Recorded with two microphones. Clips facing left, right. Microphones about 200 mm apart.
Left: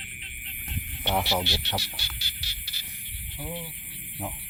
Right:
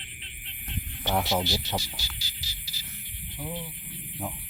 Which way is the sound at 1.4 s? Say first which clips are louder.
Right 1 dB; 65° left (ahead or behind).